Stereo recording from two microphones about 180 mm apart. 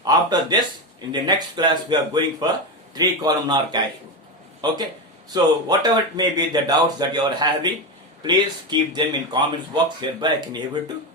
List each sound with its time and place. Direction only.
0.0 s speech: 20° right (ahead or behind)
5.3 s speech: 20° right (ahead or behind)